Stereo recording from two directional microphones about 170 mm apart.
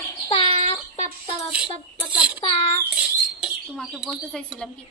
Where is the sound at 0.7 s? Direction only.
40° left (ahead or behind).